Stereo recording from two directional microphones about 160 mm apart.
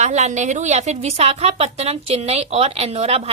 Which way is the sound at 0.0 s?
45° right (ahead or behind).